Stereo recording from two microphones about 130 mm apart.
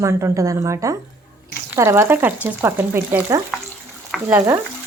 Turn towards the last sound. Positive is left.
turn(degrees=-15)  # may be behind; listen again after turning